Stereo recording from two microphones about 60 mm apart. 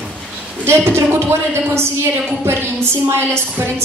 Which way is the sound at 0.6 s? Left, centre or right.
Right.